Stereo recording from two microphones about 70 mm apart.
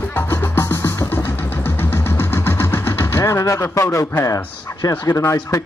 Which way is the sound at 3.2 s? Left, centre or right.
Left.